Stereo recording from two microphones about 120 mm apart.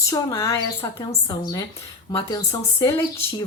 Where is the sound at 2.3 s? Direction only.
30° left (ahead or behind).